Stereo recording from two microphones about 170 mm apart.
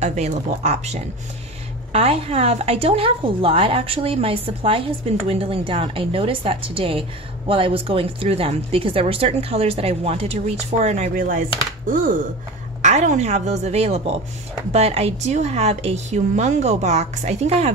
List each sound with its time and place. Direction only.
0.0 s a woman's voice: 40° right (ahead or behind)
1.9 s a woman's voice: 35° right (ahead or behind); by 11.4 s 50° right (ahead or behind)
12.8 s a woman's voice: 45° right (ahead or behind)